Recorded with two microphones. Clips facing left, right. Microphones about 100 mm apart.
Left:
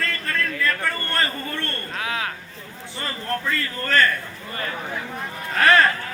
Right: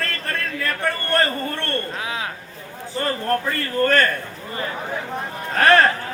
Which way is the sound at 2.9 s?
50° right (ahead or behind).